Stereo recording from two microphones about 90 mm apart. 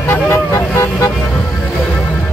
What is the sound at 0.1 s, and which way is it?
Vehicle, 30° left (ahead or behind).